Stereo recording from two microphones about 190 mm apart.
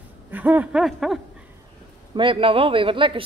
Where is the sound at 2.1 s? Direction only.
25° right (ahead or behind).